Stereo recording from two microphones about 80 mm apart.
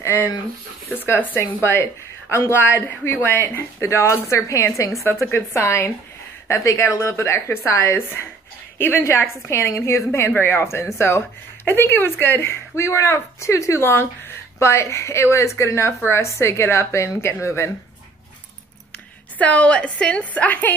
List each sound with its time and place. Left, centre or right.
0.0 s a woman's voice: left
5.2 s a woman's voice: left
19.3 s a woman's voice: centre